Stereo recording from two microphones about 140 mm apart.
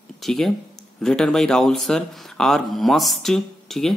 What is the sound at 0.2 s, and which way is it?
Speech, centre (ahead or behind).